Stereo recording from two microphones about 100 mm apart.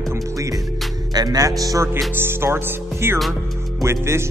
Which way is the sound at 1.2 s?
40° right (ahead or behind).